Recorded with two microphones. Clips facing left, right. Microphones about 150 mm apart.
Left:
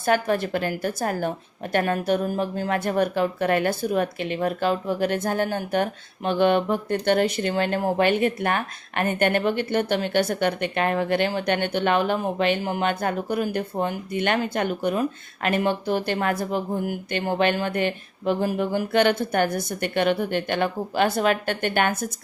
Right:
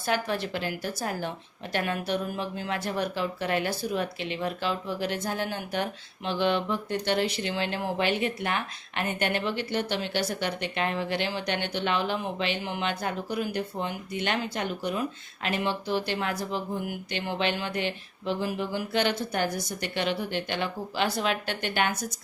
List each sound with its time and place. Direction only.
0.0 s speech: 50° left (ahead or behind)